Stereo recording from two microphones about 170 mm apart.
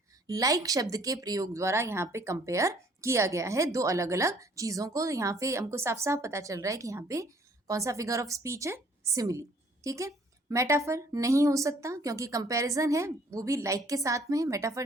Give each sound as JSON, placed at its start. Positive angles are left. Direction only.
{"t": 0.3, "sound": "a woman's voice", "side_deg": -20}